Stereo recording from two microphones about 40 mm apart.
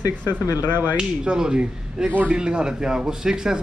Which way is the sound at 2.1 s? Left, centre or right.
Right.